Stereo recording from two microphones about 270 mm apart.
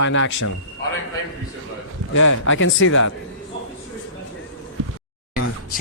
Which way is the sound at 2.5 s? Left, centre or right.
Left.